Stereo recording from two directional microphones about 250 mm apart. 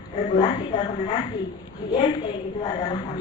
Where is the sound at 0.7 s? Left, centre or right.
Centre.